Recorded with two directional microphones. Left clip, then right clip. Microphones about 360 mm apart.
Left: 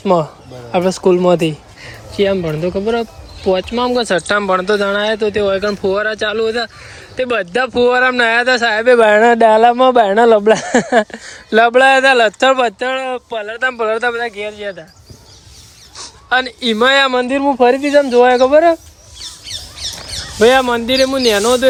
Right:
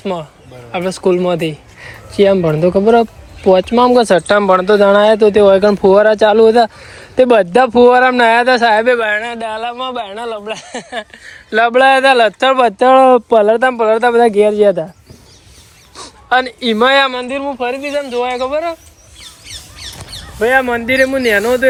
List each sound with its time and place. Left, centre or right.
0.0 s speech: centre
16.0 s speech: centre
20.4 s speech: centre